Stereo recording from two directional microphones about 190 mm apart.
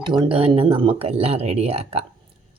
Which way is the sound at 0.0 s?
25° right (ahead or behind).